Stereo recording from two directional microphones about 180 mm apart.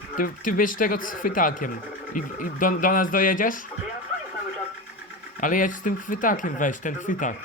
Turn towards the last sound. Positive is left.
turn(degrees=45)  # may be behind; listen again after turning